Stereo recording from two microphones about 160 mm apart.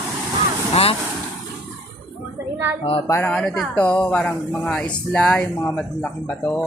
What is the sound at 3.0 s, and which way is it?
Speech, 15° left (ahead or behind).